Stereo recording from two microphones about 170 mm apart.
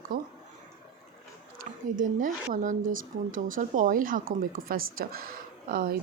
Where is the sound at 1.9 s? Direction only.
50° right (ahead or behind).